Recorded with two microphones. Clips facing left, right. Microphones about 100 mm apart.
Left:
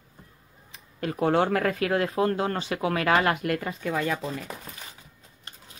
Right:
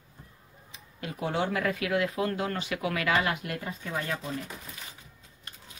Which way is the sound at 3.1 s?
55° left (ahead or behind).